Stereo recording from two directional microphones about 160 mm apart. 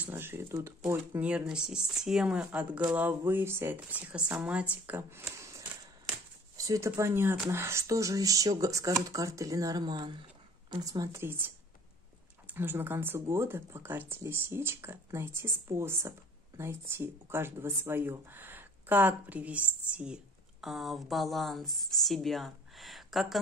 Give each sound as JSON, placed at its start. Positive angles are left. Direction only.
{"t": 0.0, "sound": "speech", "side_deg": -15}